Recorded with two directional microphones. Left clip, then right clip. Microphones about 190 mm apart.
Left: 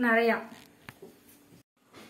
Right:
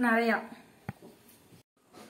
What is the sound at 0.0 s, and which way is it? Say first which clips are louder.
Speech: left 2 dB; 15° left (ahead or behind).